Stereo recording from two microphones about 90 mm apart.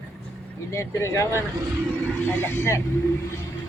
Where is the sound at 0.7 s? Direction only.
35° left (ahead or behind).